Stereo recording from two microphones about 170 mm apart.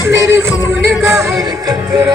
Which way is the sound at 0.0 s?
15° right (ahead or behind).